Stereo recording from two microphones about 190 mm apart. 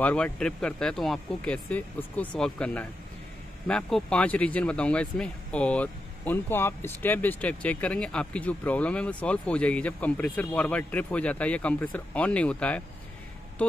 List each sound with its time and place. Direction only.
0.0 s speech: 5° left (ahead or behind)